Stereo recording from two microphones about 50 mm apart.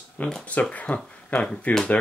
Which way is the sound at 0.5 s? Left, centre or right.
Left.